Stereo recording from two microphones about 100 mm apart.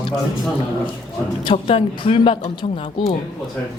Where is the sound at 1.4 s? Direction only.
65° left (ahead or behind).